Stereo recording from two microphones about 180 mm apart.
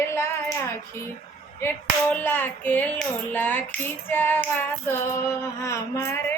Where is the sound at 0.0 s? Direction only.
15° left (ahead or behind).